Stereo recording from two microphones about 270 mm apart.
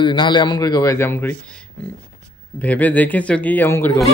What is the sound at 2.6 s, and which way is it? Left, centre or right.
Speech, centre.